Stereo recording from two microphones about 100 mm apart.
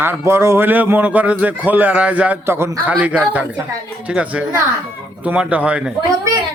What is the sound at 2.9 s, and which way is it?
Speech, 15° right (ahead or behind).